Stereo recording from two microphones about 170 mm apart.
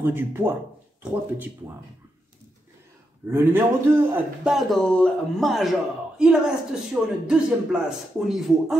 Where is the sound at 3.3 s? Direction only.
15° right (ahead or behind).